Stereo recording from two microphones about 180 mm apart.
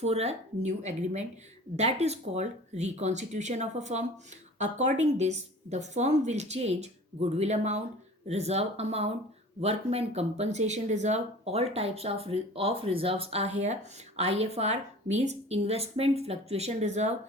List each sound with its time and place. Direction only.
0.0 s speech: 35° right (ahead or behind)